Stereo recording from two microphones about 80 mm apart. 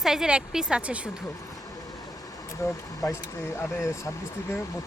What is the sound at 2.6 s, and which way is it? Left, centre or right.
Speech, left.